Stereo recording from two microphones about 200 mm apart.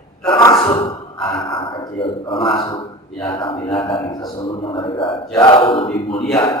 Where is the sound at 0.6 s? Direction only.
25° left (ahead or behind).